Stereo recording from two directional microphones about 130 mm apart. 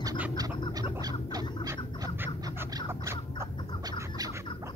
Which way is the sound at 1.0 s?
30° right (ahead or behind).